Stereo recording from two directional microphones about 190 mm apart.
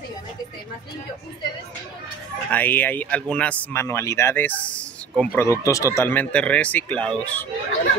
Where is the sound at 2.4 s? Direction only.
10° left (ahead or behind).